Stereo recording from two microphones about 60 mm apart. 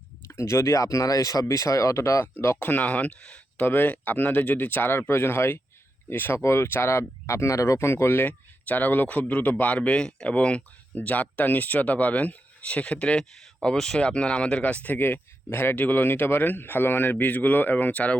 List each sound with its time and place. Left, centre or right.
0.3 s speech: left
2.6 s speech: left
3.6 s speech: left
7.3 s speech: left
8.3 s speech: left
14.9 s speech: left